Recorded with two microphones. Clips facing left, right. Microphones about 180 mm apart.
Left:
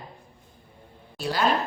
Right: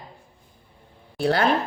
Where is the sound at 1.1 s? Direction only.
55° right (ahead or behind).